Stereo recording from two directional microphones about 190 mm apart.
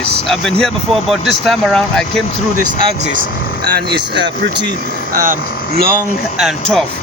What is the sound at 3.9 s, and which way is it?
Speech, 65° right (ahead or behind).